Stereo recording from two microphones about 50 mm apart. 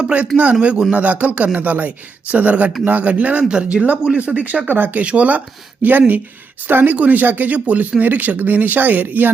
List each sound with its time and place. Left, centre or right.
0.3 s speech: centre
0.9 s speech: right